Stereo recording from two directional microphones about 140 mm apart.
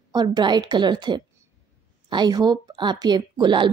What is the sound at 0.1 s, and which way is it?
A woman's voice, 30° right (ahead or behind).